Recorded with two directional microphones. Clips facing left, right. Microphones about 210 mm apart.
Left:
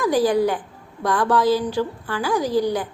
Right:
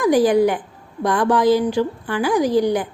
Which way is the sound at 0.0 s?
15° right (ahead or behind).